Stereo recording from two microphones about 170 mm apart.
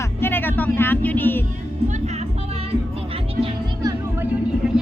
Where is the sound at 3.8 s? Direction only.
10° right (ahead or behind).